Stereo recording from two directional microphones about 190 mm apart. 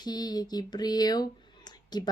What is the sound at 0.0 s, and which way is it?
Speech, 20° left (ahead or behind).